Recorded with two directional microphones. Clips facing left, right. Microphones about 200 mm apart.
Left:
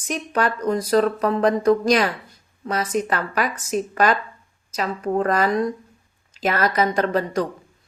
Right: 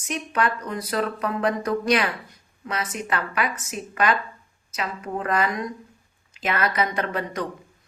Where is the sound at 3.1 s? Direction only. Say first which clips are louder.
Left 3 dB; 40° left (ahead or behind).